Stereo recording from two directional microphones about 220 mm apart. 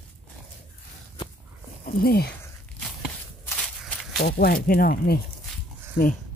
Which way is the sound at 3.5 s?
Centre (ahead or behind).